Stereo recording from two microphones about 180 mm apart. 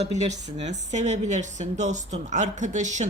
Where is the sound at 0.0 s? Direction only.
40° right (ahead or behind).